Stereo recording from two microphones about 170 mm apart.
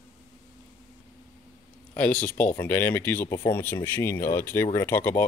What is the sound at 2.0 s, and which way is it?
Speech, 10° left (ahead or behind).